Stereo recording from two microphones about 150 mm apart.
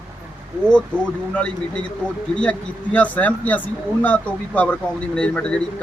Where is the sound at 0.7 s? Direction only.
5° left (ahead or behind).